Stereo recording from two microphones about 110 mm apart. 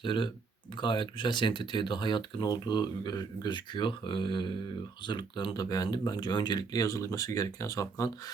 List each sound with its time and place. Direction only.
0.0 s speech: 50° left (ahead or behind); by 8.1 s 30° left (ahead or behind)